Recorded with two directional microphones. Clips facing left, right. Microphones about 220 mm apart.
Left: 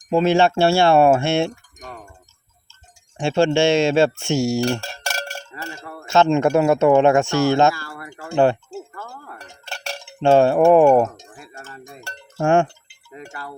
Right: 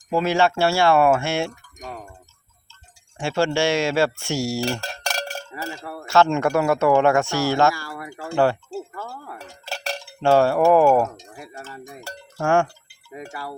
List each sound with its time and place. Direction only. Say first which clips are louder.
0.1 s speech: left 4 dB; 25° left (ahead or behind)
1.8 s wind chime: right 3 dB; centre (ahead or behind)
3.2 s speech: left 4 dB; 25° left (ahead or behind)
4.6 s cowbell: left 3 dB; centre (ahead or behind)
6.1 s speech: left 3 dB; 20° left (ahead or behind)
7.7 s speech: left 1 dB; 15° right (ahead or behind)
9.0 s dishes: right 2 dB; 10° right (ahead or behind)
10.1 s speech: left 3 dB; 20° left (ahead or behind)
12.4 s speech: left 3 dB; 20° left (ahead or behind)
13.1 s speech: right 2 dB; 10° right (ahead or behind)